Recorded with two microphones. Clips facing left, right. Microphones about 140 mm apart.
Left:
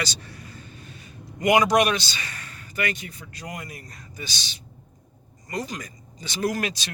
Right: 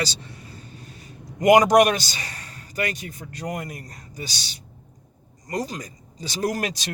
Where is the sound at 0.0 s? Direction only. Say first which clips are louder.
Right 3 dB; 25° right (ahead or behind).